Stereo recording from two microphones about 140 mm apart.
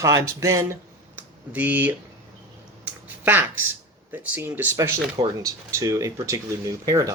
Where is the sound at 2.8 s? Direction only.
15° right (ahead or behind).